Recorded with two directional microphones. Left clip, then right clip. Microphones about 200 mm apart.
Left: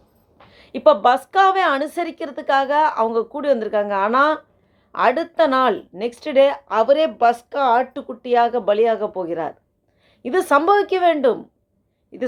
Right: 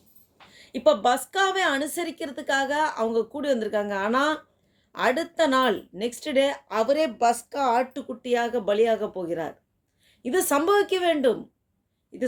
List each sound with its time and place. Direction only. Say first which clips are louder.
0.5 s speech: left 6 dB; 10° right (ahead or behind)